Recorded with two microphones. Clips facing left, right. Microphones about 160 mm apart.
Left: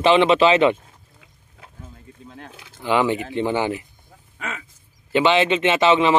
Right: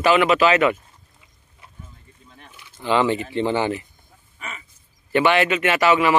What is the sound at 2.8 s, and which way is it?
Speech, 15° left (ahead or behind).